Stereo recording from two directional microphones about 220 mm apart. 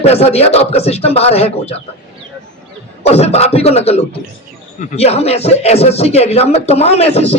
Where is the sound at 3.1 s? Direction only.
30° left (ahead or behind).